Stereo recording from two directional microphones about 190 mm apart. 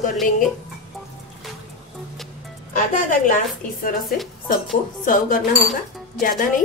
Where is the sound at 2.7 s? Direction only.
45° left (ahead or behind).